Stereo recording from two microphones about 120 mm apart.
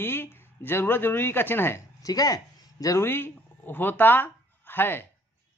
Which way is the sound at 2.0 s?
30° left (ahead or behind).